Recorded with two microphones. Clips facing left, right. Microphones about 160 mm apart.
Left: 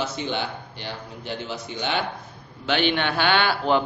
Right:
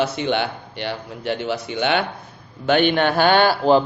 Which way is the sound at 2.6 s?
50° right (ahead or behind).